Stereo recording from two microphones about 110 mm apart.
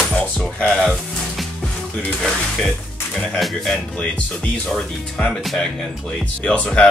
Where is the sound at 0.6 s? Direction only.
Centre (ahead or behind).